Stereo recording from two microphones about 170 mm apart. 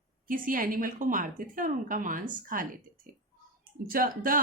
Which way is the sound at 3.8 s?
55° right (ahead or behind).